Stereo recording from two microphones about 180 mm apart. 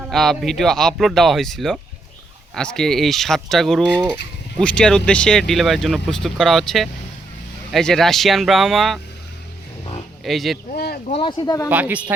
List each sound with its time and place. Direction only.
0.1 s speech: centre (ahead or behind)
10.2 s speech: centre (ahead or behind)
10.8 s speech: 60° left (ahead or behind)
11.1 s speech: 25° left (ahead or behind)
11.7 s speech: 10° right (ahead or behind)